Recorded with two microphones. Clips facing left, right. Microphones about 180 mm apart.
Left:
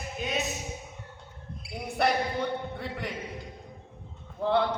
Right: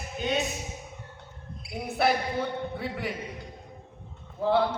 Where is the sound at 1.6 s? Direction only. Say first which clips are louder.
Right 1 dB; 5° right (ahead or behind).